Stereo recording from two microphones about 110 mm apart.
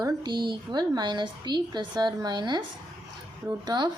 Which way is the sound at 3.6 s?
40° right (ahead or behind).